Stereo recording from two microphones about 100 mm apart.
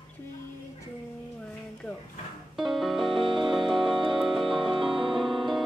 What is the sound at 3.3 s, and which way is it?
Music, 55° right (ahead or behind).